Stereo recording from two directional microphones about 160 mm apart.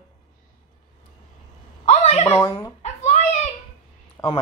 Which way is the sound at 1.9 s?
45° left (ahead or behind).